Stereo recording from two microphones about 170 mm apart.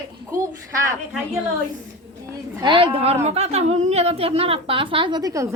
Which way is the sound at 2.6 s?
30° right (ahead or behind).